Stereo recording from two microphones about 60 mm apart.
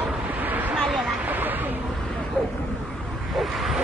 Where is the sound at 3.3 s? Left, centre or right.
Centre.